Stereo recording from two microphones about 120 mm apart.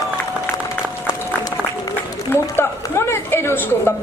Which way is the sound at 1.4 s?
25° left (ahead or behind).